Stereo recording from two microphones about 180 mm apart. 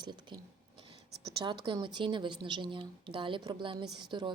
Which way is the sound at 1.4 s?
25° right (ahead or behind).